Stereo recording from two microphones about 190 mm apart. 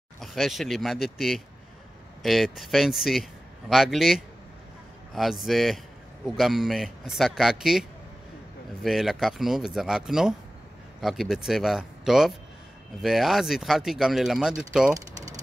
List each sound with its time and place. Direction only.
0.2 s speech: centre (ahead or behind)
8.8 s speech: centre (ahead or behind)